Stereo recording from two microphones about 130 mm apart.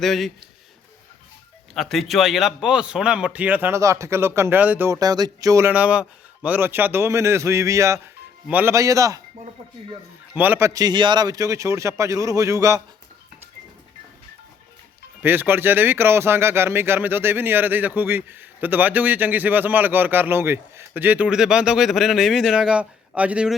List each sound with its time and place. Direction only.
0.0 s speech: centre (ahead or behind)
1.7 s speech: centre (ahead or behind)
4.9 s a man's voice: 30° right (ahead or behind)
5.7 s a man's voice: 10° right (ahead or behind)
8.4 s speech: 10° right (ahead or behind)
8.7 s a man's voice: 25° right (ahead or behind)
10.3 s a man's voice: 15° right (ahead or behind)
15.2 s speech: 15° right (ahead or behind)